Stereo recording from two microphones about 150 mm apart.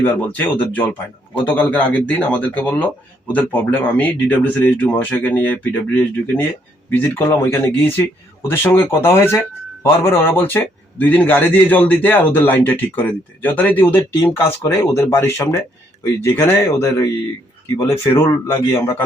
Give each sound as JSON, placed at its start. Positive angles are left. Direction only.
{"t": 0.0, "sound": "a man's voice", "side_deg": 10}
{"t": 6.9, "sound": "a man's voice", "side_deg": 15}